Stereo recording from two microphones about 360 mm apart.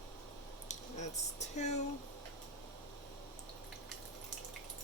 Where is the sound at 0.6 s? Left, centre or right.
Centre.